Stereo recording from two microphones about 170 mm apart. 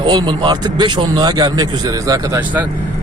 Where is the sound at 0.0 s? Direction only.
25° right (ahead or behind).